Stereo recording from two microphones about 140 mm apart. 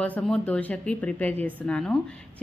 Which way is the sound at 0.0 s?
5° left (ahead or behind).